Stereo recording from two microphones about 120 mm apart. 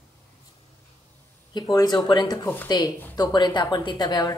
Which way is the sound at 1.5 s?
35° left (ahead or behind).